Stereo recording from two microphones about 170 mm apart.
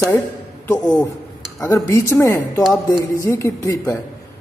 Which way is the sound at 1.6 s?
15° left (ahead or behind).